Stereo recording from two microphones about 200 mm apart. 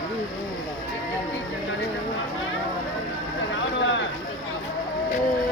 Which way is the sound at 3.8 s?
70° left (ahead or behind).